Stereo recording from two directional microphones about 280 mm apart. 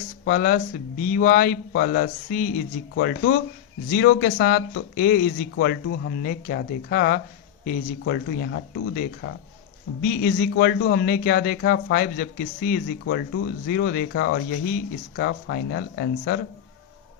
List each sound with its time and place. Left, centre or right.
0.3 s a man's voice: left